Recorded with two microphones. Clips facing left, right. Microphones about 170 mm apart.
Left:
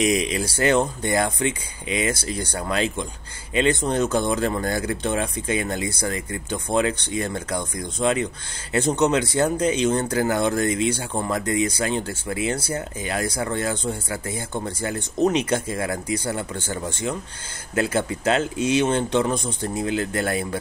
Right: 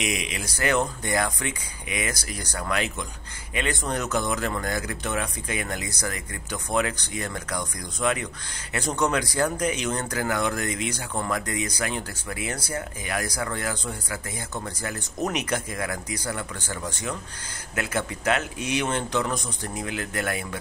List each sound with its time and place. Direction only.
0.0 s speech: 35° left (ahead or behind)